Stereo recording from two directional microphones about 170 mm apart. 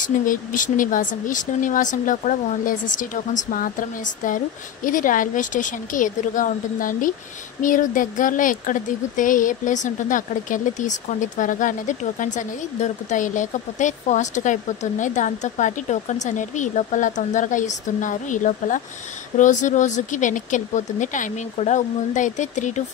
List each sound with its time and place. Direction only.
0.0 s speech: 50° left (ahead or behind)